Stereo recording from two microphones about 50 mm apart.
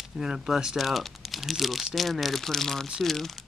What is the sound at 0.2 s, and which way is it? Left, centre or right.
Speech, centre.